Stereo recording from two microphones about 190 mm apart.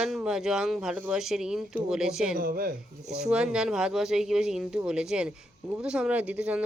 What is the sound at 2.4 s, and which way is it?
Speech, 50° right (ahead or behind).